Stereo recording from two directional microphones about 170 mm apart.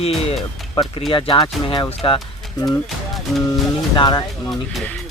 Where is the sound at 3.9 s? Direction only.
25° left (ahead or behind).